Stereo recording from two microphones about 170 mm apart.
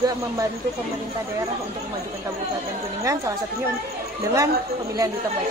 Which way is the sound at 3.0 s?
20° right (ahead or behind).